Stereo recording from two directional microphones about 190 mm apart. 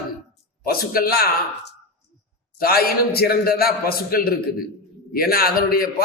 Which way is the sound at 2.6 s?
55° left (ahead or behind).